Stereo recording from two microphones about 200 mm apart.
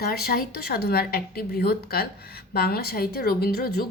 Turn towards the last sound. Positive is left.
turn(degrees=50)  # may be behind; listen again after turning